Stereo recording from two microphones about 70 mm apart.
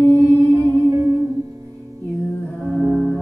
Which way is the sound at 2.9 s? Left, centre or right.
Centre.